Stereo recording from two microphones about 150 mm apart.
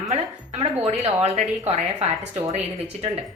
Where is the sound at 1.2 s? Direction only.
45° right (ahead or behind).